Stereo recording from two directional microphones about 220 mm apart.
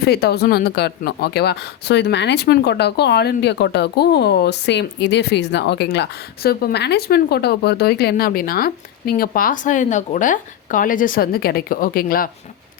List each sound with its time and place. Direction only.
0.0 s speech: 45° left (ahead or behind)